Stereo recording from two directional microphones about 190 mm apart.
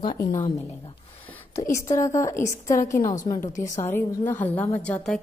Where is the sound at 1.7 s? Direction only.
15° left (ahead or behind).